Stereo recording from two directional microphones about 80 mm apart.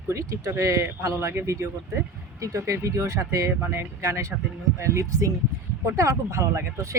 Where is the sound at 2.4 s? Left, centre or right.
Right.